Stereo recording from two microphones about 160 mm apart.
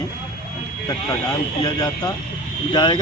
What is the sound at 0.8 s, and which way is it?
Speech, 25° left (ahead or behind).